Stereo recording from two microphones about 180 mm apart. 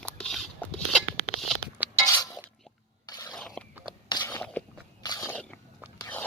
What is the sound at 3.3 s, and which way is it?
Biting, 5° left (ahead or behind).